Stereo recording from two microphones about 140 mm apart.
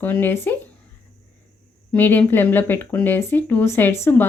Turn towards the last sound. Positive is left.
turn(degrees=15)  # may be behind; listen again after turning